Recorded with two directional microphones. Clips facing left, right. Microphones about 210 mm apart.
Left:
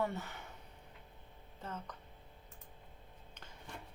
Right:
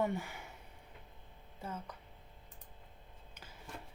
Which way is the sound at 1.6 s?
10° right (ahead or behind).